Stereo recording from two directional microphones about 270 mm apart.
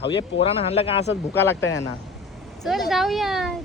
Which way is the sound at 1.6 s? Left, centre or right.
Left.